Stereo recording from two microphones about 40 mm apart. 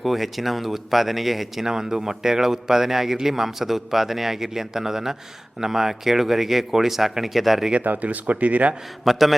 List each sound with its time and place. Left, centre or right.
0.0 s speech: centre
1.6 s speech: centre
7.8 s speech: right
9.0 s speech: centre